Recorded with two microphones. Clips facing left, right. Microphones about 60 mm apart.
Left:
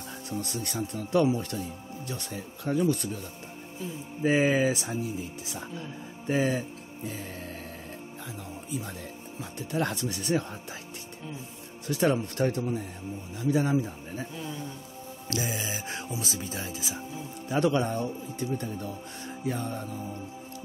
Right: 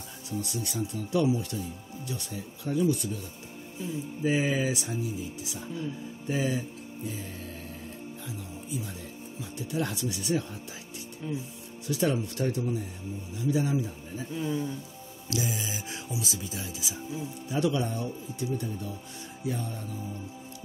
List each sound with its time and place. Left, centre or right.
0.3 s speech: left
4.2 s speech: left
9.6 s speech: left
11.9 s speech: left
14.3 s speech: centre
15.2 s speech: left